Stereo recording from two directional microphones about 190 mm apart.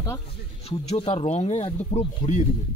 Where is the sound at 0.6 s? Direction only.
30° left (ahead or behind).